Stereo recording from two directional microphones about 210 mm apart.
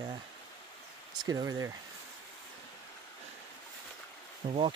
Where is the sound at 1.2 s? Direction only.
15° right (ahead or behind).